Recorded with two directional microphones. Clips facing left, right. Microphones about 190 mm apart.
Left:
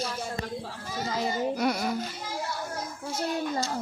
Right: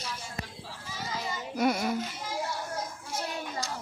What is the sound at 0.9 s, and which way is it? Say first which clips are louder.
Children playing: left 7 dB; 35° left (ahead or behind).